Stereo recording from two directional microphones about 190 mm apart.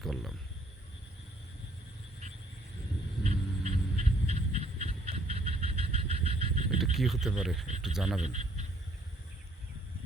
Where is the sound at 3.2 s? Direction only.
35° right (ahead or behind).